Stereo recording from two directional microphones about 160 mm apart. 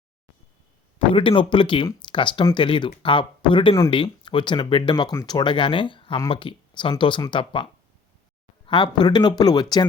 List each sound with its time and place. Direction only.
0.9 s speech: 35° left (ahead or behind)